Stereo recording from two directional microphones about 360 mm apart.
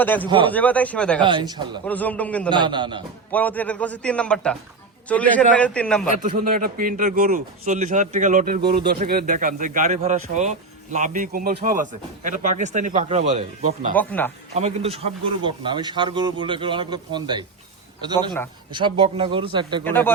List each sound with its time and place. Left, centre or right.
0.0 s a man's voice: centre
1.2 s a man's voice: centre
1.8 s a man's voice: centre
2.5 s a man's voice: centre
3.3 s a man's voice: centre
6.2 s speech: right
13.9 s a man's voice: centre
14.5 s a man's voice: centre
18.7 s a man's voice: centre
19.8 s a man's voice: centre